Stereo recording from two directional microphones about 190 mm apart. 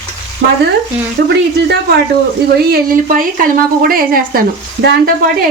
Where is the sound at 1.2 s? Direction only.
60° right (ahead or behind).